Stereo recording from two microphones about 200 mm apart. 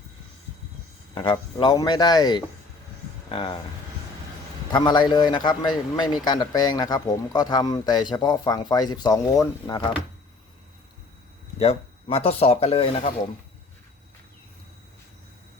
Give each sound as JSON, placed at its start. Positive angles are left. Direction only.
{"t": 1.1, "sound": "speech", "side_deg": 25}
{"t": 4.7, "sound": "speech", "side_deg": 20}
{"t": 11.6, "sound": "speech", "side_deg": 30}